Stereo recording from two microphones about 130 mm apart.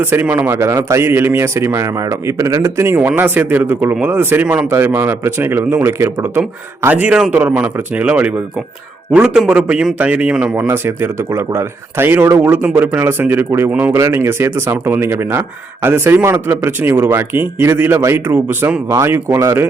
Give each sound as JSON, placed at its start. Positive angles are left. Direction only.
{"t": 0.0, "sound": "speech", "side_deg": -15}
{"t": 10.7, "sound": "speech", "side_deg": -20}